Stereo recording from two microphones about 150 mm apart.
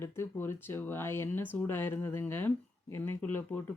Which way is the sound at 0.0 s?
15° left (ahead or behind).